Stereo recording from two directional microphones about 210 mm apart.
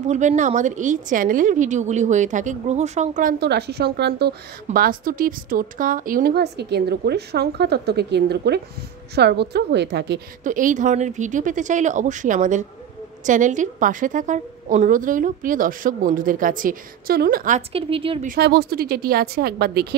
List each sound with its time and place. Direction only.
0.1 s a woman's voice: 35° right (ahead or behind); by 10.2 s 55° right (ahead or behind)
10.4 s a woman's voice: 40° right (ahead or behind)
17.6 s a woman's voice: 25° right (ahead or behind)
18.2 s speech: 45° right (ahead or behind)